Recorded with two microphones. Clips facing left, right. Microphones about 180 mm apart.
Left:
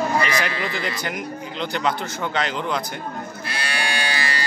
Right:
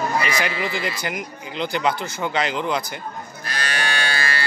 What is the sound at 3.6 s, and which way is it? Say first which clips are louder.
Livestock: right 1 dB; 10° left (ahead or behind).